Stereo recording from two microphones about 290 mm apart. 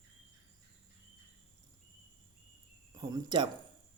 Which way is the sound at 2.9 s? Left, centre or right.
Centre.